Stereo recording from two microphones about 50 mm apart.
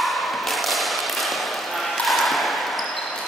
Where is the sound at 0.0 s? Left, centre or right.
Centre.